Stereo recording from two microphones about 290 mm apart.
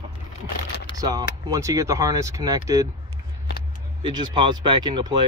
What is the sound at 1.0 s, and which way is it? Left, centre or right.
Speech, centre.